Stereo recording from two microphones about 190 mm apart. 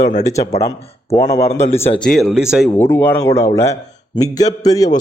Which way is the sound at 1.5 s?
35° left (ahead or behind).